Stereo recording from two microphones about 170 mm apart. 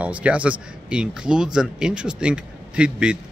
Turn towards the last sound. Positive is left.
turn(degrees=-5)  # may be behind; listen again after turning